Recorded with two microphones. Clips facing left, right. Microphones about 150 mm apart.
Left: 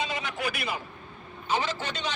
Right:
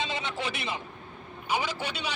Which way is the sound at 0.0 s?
25° right (ahead or behind).